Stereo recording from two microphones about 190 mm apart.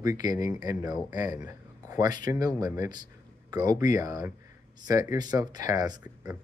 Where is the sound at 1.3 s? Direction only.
20° right (ahead or behind).